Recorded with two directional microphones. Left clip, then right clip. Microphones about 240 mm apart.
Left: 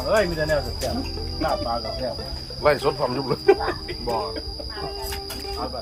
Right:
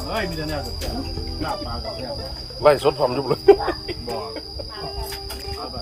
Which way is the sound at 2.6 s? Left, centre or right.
Right.